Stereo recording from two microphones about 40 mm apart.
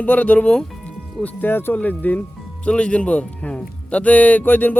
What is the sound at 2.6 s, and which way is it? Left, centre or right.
A man's voice, left.